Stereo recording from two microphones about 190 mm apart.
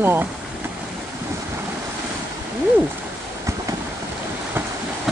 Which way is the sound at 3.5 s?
15° right (ahead or behind).